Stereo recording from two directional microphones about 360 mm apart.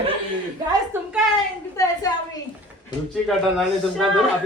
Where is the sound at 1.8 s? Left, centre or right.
Centre.